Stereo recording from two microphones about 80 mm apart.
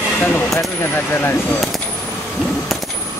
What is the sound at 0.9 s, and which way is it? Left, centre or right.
Speech, left.